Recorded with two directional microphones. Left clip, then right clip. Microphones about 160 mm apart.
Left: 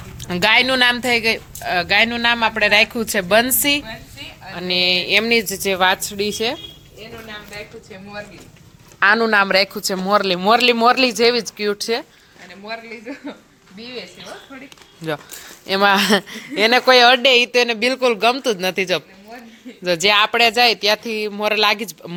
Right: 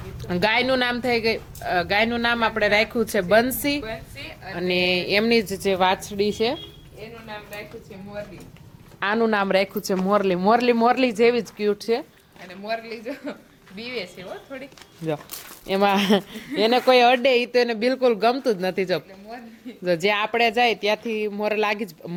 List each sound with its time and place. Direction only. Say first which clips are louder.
0.2 s a woman's voice: left 6 dB; 5° right (ahead or behind)
4.7 s a woman's voice: left 5 dB; 30° right (ahead or behind)
9.0 s a man's voice: left 8 dB; centre (ahead or behind)
9.3 s a woman's voice: left 6 dB; 15° right (ahead or behind)
12.5 s speech: right 1 dB; 75° right (ahead or behind); by 13.3 s 60° right (ahead or behind)
15.6 s a woman's voice: left 5 dB; 10° right (ahead or behind)